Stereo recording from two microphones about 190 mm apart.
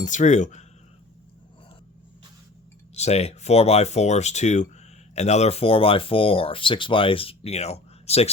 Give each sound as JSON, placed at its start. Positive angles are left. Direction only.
{"t": 0.0, "sound": "speech", "side_deg": 40}
{"t": 2.9, "sound": "speech", "side_deg": 35}